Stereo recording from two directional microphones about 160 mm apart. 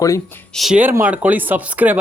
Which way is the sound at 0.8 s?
10° right (ahead or behind).